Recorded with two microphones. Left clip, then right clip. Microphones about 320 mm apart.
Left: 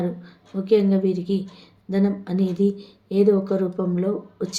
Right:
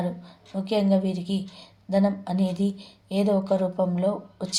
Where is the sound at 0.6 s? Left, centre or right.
Centre.